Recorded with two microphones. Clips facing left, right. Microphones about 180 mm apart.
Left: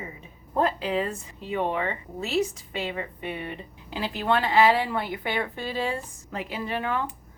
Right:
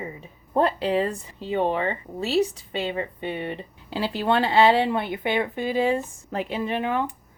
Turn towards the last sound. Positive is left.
turn(degrees=-20)  # may be behind; listen again after turning